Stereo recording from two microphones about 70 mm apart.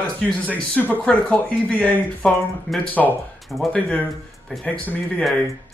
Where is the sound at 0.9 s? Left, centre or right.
Left.